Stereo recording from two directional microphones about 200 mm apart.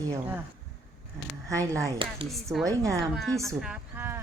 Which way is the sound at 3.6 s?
5° right (ahead or behind).